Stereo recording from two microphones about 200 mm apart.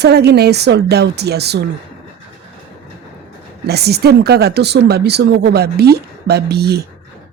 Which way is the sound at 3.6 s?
55° right (ahead or behind).